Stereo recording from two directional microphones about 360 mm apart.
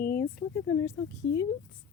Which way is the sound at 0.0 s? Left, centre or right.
Left.